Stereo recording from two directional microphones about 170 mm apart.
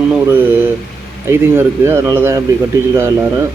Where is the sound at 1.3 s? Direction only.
15° right (ahead or behind).